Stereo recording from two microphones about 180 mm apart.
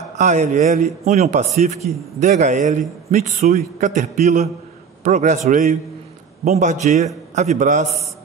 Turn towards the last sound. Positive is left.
turn(degrees=-40)  # may be behind; listen again after turning